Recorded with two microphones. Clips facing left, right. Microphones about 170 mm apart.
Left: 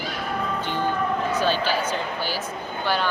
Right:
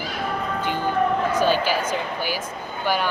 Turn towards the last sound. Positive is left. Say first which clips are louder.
# right 1 dB
turn(degrees=-10)  # may be behind; listen again after turning